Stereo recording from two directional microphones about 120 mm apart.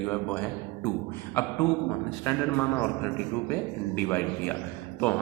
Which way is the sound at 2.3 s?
20° left (ahead or behind).